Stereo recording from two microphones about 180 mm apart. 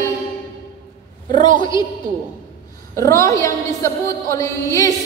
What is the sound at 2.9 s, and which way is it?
A woman's voice, 15° left (ahead or behind).